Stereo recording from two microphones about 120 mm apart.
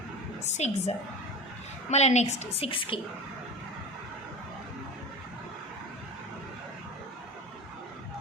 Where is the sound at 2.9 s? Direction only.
45° left (ahead or behind).